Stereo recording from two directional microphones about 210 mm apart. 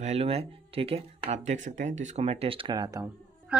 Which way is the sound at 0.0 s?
30° right (ahead or behind).